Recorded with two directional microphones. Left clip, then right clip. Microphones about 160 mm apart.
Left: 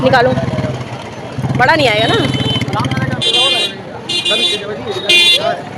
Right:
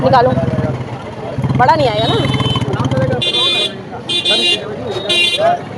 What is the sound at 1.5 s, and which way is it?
Speech, 35° left (ahead or behind).